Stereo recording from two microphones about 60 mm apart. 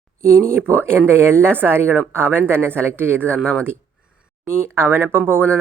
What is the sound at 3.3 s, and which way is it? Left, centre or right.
Speech, centre.